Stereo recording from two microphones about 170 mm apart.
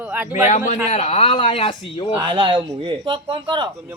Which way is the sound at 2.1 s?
25° right (ahead or behind).